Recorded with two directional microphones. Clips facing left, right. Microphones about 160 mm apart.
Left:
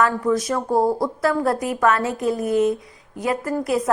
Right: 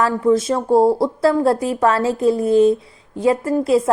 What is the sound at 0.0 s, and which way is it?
A woman's voice, 25° right (ahead or behind).